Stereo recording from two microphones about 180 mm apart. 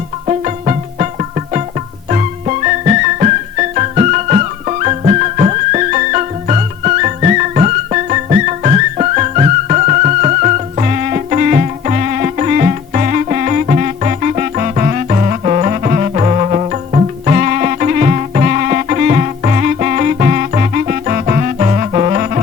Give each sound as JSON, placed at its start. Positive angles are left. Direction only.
{"t": 0.3, "sound": "music", "side_deg": -40}